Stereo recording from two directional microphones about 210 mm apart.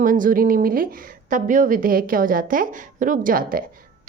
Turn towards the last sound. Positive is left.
turn(degrees=-40)  # may be behind; listen again after turning